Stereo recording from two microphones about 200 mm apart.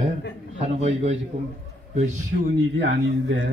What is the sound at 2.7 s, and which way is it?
Speech, 65° right (ahead or behind).